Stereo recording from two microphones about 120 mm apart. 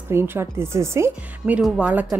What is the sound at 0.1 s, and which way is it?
Speech, 20° right (ahead or behind).